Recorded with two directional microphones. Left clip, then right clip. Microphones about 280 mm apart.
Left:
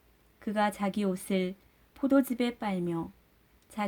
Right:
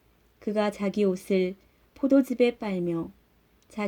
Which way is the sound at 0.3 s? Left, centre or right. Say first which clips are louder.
Right 2 dB; centre.